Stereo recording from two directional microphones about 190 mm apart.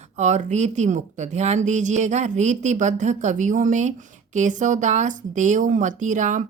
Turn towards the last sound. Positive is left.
turn(degrees=-40)  # may be behind; listen again after turning